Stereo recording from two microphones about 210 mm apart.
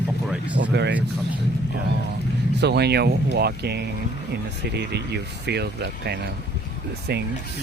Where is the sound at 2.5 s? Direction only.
55° right (ahead or behind).